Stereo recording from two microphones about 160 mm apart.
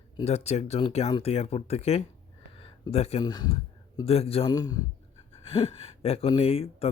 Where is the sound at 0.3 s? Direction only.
40° left (ahead or behind).